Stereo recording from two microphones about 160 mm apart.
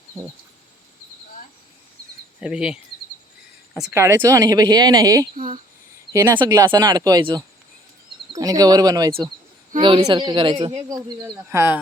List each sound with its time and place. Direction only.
2.4 s speech: 5° right (ahead or behind)
3.9 s speech: 20° right (ahead or behind)
11.5 s speech: 10° right (ahead or behind)